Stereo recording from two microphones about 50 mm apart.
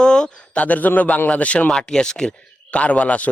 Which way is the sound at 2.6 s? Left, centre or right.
Left.